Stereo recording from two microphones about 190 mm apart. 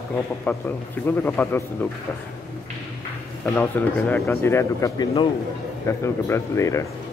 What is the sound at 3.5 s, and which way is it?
Speech, 10° left (ahead or behind).